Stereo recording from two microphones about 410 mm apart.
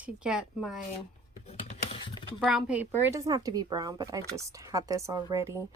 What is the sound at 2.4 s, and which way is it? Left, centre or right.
A woman's voice, centre.